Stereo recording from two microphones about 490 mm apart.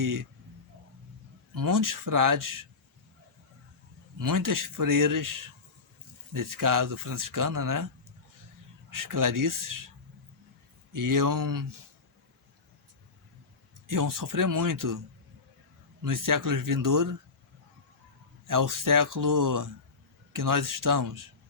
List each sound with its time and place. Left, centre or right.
0.0 s speech: right
1.5 s speech: right
4.2 s speech: right
6.3 s speech: right
8.9 s speech: right
10.9 s speech: right
13.8 s speech: right
16.0 s speech: right
18.4 s speech: right